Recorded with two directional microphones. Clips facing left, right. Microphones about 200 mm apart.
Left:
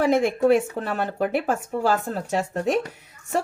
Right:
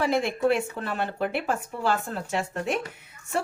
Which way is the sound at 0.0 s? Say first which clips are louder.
Left 5 dB; 45° left (ahead or behind).